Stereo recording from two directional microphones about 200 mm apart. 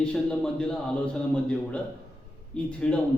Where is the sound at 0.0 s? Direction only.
5° left (ahead or behind).